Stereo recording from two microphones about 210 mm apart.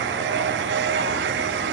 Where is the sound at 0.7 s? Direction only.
65° right (ahead or behind).